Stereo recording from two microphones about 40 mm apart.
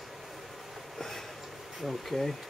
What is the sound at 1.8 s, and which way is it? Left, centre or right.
Speech, centre.